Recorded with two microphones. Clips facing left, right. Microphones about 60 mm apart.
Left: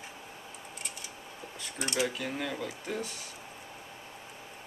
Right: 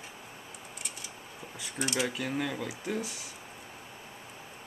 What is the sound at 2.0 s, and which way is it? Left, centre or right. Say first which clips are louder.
Speech: left 1 dB; centre.